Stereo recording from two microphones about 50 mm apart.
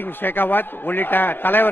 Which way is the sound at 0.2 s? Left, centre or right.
Left.